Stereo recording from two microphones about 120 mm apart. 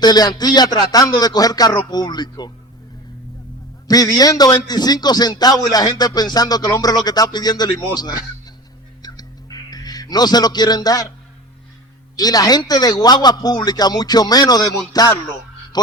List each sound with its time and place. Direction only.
0.0 s a man's voice: 35° left (ahead or behind)
3.8 s a man's voice: 30° left (ahead or behind)
9.0 s a sound: 35° left (ahead or behind)
12.1 s a man's voice: 30° left (ahead or behind)